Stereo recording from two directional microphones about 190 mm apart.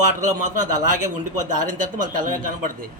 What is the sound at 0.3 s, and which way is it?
A man's voice, 40° right (ahead or behind).